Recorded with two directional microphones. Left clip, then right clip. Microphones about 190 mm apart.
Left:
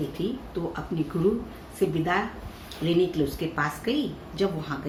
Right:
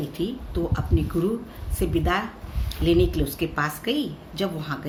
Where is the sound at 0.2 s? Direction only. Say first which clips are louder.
Right 3 dB; 70° right (ahead or behind).